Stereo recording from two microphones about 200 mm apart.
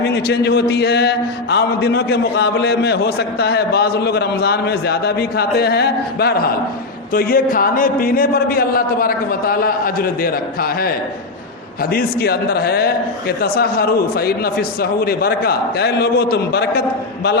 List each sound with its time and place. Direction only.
0.0 s a man's voice: 55° left (ahead or behind)